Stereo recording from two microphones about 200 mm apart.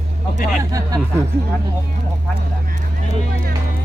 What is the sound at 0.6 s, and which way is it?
Speech, 15° right (ahead or behind).